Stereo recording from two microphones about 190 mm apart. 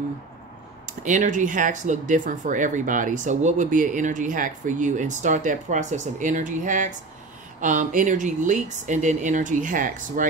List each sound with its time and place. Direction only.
1.0 s speech: 40° right (ahead or behind)